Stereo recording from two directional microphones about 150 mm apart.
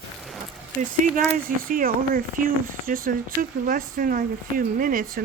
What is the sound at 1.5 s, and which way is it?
Speech, 70° right (ahead or behind).